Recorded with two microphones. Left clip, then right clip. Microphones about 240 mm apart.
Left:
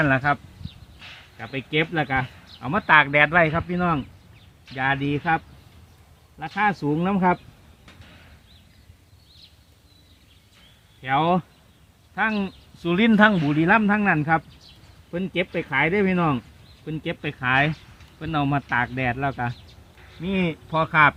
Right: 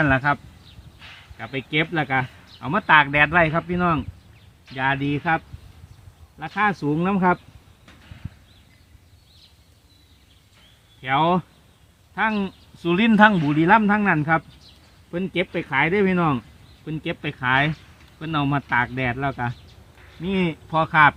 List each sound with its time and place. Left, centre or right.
0.0 s speech: centre
0.9 s a sound: left
1.4 s speech: centre
6.4 s speech: centre
11.0 s speech: centre